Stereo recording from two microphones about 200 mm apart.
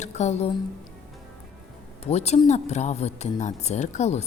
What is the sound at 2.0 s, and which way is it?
Speech, 35° left (ahead or behind).